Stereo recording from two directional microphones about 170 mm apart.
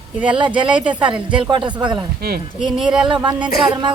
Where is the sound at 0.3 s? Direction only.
30° right (ahead or behind).